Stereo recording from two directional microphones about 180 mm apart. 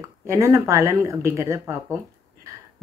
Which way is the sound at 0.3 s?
15° right (ahead or behind).